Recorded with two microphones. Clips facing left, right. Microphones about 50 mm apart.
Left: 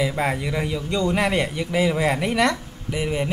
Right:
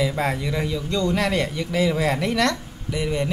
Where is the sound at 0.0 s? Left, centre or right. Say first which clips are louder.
Even; centre.